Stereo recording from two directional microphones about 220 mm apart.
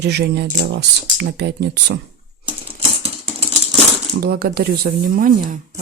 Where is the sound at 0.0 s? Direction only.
50° right (ahead or behind).